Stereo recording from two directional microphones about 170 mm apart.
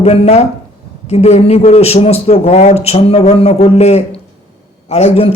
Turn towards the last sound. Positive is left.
turn(degrees=35)  # may be behind; listen again after turning